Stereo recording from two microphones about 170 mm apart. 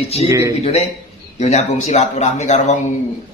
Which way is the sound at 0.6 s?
35° left (ahead or behind).